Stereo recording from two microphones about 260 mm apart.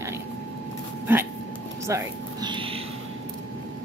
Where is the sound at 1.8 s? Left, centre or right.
Centre.